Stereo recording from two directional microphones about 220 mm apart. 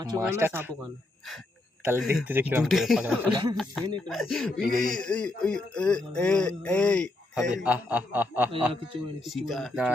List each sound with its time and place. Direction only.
0.0 s speech: 15° right (ahead or behind)
1.8 s speech: 10° right (ahead or behind)
3.2 s speech: 20° right (ahead or behind)
4.1 s speech: centre (ahead or behind)